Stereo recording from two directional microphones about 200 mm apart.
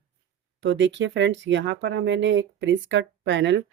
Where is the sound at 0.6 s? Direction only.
65° right (ahead or behind).